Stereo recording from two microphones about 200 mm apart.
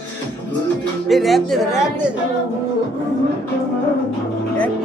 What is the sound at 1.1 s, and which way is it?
A woman's voice, centre (ahead or behind).